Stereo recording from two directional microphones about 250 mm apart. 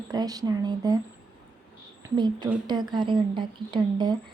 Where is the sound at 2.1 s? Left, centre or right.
Centre.